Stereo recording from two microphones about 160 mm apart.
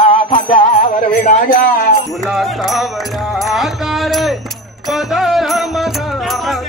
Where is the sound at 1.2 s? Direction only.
65° left (ahead or behind).